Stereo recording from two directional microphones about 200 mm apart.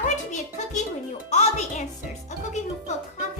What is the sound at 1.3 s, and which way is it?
Music, 35° left (ahead or behind).